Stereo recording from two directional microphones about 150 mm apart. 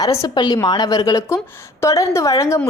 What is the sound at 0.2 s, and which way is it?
A woman's voice, 25° left (ahead or behind).